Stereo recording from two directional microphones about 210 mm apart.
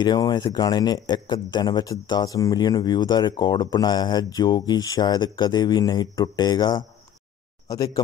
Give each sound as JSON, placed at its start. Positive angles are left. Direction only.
{"t": 0.0, "sound": "speech", "side_deg": 20}